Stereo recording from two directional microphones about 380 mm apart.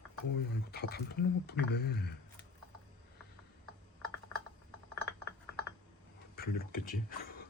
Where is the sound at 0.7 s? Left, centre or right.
Left.